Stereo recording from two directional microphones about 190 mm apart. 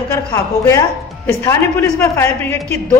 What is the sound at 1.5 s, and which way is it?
Speech, 15° left (ahead or behind).